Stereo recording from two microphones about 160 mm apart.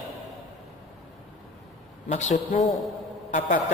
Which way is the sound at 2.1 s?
45° left (ahead or behind).